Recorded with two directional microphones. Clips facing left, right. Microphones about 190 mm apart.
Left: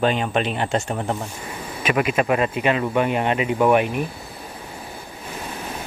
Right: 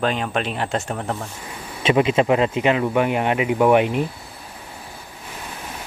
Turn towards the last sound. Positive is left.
turn(degrees=-20)  # may be behind; listen again after turning